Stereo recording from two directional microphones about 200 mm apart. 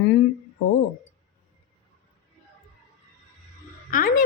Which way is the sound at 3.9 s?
45° left (ahead or behind).